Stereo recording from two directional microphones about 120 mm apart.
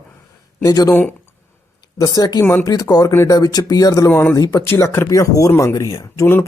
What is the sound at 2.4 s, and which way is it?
Speech, 20° left (ahead or behind).